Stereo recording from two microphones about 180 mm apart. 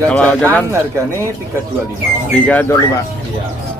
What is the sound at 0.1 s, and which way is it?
Speech, 5° left (ahead or behind).